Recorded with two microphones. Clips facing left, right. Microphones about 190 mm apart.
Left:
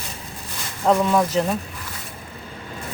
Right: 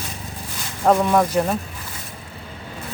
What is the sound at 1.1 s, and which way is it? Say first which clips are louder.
Speech: right 1 dB; 10° right (ahead or behind).